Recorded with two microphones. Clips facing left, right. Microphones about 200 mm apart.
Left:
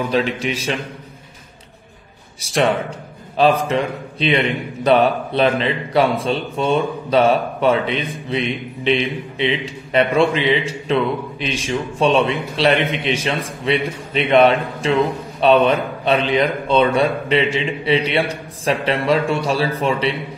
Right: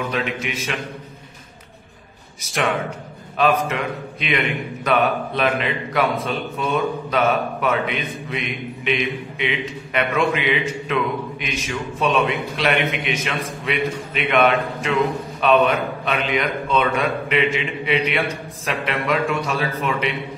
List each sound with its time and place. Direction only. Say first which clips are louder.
0.1 s a man's voice: left 5 dB; 30° left (ahead or behind)
2.4 s a man's voice: left 5 dB; 30° left (ahead or behind)